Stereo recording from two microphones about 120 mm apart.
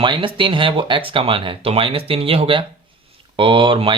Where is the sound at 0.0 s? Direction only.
45° right (ahead or behind).